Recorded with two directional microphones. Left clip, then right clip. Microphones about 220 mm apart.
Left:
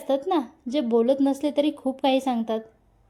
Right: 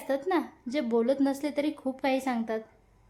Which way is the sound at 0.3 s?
15° left (ahead or behind).